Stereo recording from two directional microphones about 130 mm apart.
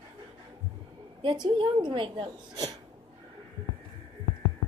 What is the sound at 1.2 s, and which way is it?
A woman's voice, 40° right (ahead or behind).